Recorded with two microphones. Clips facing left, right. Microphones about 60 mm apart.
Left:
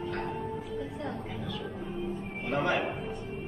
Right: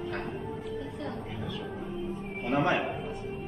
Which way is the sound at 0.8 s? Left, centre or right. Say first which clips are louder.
Left 1 dB; centre.